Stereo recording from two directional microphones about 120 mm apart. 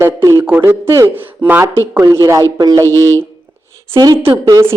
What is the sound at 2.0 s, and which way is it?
Speech, 25° right (ahead or behind).